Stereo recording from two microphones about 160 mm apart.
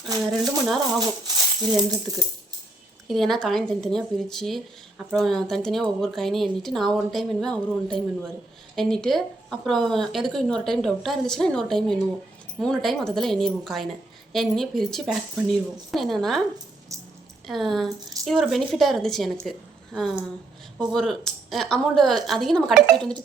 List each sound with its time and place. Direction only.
1.7 s speech: 25° right (ahead or behind)
3.1 s a woman's voice: centre (ahead or behind)
16.9 s a sound: 20° right (ahead or behind)
17.4 s a woman's voice: centre (ahead or behind)